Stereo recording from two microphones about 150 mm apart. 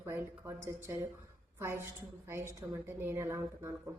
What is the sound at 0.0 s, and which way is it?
A woman's voice, 15° right (ahead or behind).